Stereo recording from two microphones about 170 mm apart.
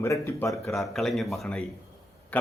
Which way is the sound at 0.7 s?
Centre (ahead or behind).